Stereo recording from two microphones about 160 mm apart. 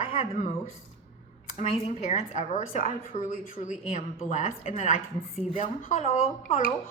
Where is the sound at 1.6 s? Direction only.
45° left (ahead or behind).